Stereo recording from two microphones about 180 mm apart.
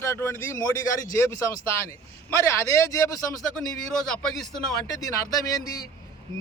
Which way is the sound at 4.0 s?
5° left (ahead or behind).